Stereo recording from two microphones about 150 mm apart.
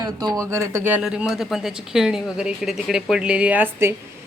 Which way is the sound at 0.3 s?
20° right (ahead or behind).